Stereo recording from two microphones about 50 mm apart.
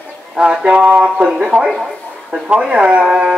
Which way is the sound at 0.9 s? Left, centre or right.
Right.